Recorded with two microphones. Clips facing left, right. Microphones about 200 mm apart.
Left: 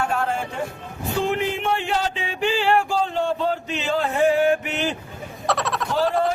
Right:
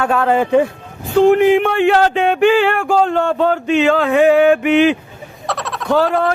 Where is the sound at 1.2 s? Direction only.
50° right (ahead or behind); by 4.9 s 80° right.